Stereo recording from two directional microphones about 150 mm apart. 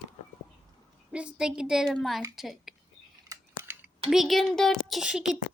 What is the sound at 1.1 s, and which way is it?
A woman's voice, 5° right (ahead or behind).